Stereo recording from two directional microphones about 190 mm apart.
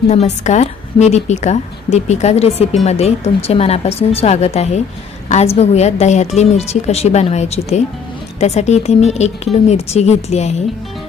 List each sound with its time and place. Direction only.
0.1 s a woman's voice: 35° left (ahead or behind)